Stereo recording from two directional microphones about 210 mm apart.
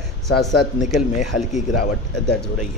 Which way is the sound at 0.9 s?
35° left (ahead or behind).